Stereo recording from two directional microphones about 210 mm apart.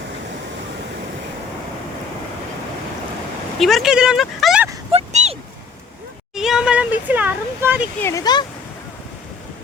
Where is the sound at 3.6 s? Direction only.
Centre (ahead or behind).